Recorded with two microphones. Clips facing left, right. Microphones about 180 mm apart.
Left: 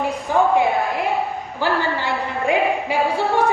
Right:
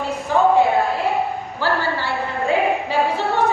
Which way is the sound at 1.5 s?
15° left (ahead or behind).